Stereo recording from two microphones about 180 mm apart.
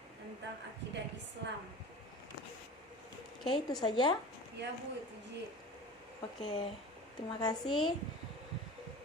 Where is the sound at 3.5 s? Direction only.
25° left (ahead or behind).